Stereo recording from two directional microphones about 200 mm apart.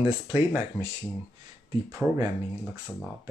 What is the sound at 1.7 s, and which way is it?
Speech, 15° right (ahead or behind).